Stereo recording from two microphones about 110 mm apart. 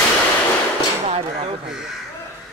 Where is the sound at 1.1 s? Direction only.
60° right (ahead or behind).